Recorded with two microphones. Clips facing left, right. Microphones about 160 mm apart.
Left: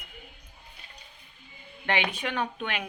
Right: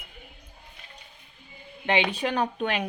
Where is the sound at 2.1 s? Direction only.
35° right (ahead or behind).